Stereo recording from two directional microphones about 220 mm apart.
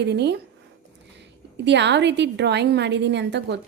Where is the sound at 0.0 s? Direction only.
50° right (ahead or behind).